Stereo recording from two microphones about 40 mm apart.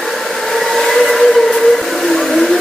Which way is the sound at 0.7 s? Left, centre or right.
Centre.